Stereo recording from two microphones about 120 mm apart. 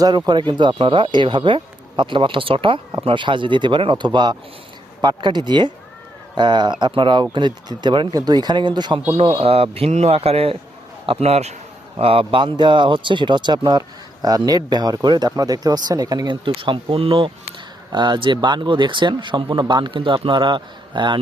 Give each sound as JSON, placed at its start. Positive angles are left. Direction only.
{"t": 0.3, "sound": "speech", "side_deg": -40}
{"t": 9.2, "sound": "a man's voice", "side_deg": -50}